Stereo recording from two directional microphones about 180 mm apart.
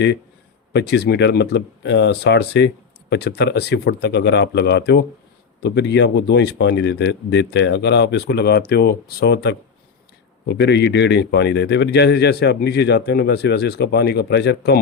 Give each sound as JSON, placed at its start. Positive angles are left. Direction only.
{"t": 0.7, "sound": "a man's voice", "side_deg": 70}